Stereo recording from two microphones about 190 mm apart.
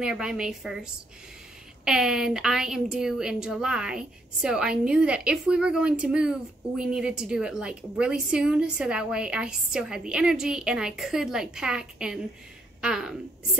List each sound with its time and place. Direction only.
0.0 s a woman's voice: 5° right (ahead or behind)
1.9 s a woman's voice: centre (ahead or behind)